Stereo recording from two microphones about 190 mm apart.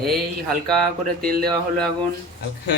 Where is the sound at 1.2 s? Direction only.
50° right (ahead or behind).